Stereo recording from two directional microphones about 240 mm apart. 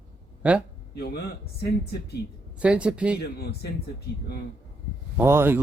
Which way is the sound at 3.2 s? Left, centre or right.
Left.